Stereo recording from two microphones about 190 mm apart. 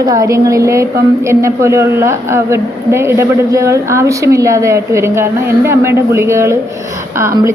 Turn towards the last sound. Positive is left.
turn(degrees=-15)  # may be behind; listen again after turning